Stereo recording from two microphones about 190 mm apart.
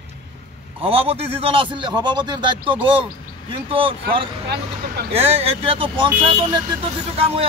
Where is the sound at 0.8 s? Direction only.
30° right (ahead or behind).